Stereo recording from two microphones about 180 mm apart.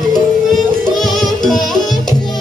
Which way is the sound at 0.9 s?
Centre (ahead or behind).